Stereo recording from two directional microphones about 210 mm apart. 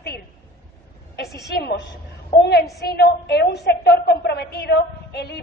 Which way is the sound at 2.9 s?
50° left (ahead or behind).